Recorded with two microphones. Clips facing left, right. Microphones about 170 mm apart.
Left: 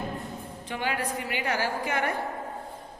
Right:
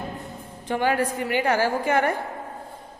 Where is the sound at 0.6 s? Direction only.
45° right (ahead or behind).